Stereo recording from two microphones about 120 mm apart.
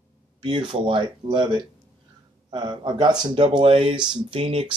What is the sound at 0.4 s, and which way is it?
Speech, 45° right (ahead or behind).